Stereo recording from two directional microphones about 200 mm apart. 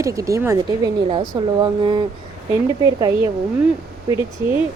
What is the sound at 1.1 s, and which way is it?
Speech, 25° right (ahead or behind).